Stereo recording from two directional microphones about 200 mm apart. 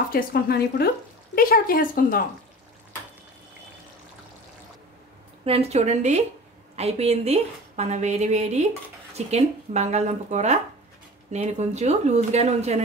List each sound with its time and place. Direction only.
0.1 s speech: 50° left (ahead or behind)
5.4 s a woman's voice: 30° right (ahead or behind)